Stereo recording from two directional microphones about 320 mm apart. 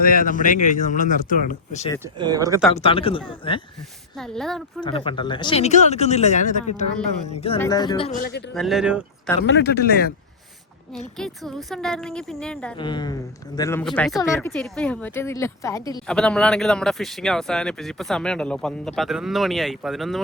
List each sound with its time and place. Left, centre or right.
0.0 s speech: left
2.1 s speech: centre
2.7 s speech: centre
4.2 s speech: centre
4.8 s speech: centre
7.6 s speech: centre; by 8.4 s left
8.5 s speech: centre
9.5 s speech: left
11.2 s speech: centre
12.7 s speech: centre